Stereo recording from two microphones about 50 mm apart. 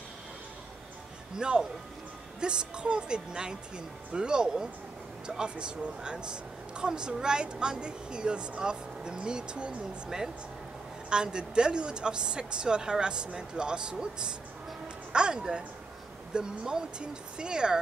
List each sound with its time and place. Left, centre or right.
1.4 s a woman's voice: centre